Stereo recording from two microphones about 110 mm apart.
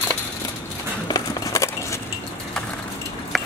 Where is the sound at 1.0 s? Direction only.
30° left (ahead or behind).